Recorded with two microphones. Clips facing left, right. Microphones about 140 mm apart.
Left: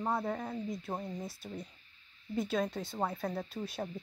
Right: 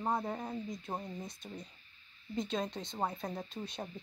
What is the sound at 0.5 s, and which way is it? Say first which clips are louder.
Speech: left 2 dB; centre (ahead or behind).